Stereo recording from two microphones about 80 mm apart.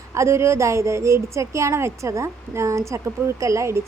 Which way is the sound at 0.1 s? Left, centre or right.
Right.